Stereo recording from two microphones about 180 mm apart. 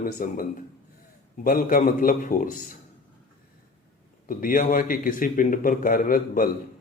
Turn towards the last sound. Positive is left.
turn(degrees=50)  # may be behind; listen again after turning